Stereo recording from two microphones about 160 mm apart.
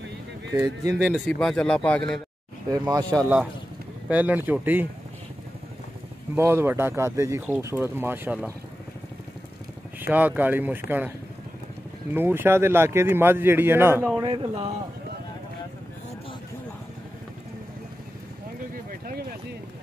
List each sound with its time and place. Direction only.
0.8 s speech: 15° right (ahead or behind)
1.2 s speech: 5° left (ahead or behind)
2.9 s speech: 25° right (ahead or behind)
4.1 s speech: 10° right (ahead or behind)
6.3 s speech: 15° right (ahead or behind)
9.9 s speech: 10° right (ahead or behind)
14.2 s speech: 30° right (ahead or behind)
18.9 s a sound: 65° right (ahead or behind)